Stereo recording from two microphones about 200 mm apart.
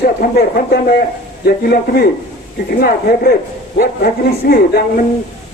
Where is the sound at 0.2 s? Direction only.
50° left (ahead or behind).